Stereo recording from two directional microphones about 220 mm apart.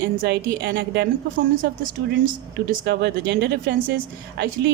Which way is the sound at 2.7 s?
50° right (ahead or behind).